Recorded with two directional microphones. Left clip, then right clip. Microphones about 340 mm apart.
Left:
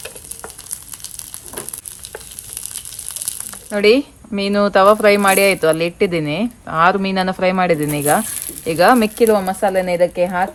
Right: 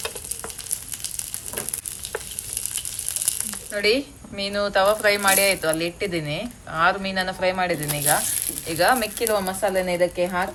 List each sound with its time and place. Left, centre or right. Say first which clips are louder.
3.2 s speech: left 1 dB; centre